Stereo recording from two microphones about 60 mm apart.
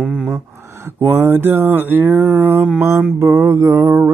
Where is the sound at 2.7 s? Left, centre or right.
Right.